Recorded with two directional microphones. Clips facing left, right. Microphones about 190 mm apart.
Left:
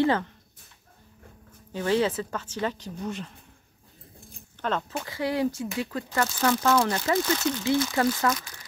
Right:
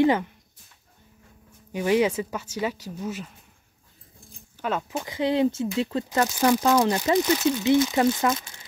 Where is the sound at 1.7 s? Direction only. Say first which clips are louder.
Right 3 dB; 15° right (ahead or behind).